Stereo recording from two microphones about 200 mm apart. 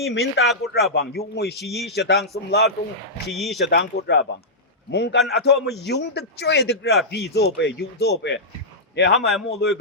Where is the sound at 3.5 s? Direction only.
60° left (ahead or behind).